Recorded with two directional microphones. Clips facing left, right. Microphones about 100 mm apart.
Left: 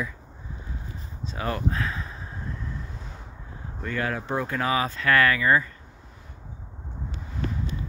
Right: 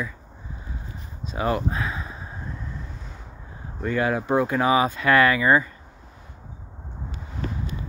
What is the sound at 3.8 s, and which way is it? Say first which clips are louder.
Speech: right 6 dB; 15° right (ahead or behind).